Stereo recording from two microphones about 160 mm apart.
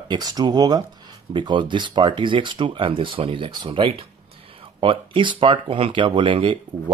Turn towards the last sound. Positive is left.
turn(degrees=-30)  # may be behind; listen again after turning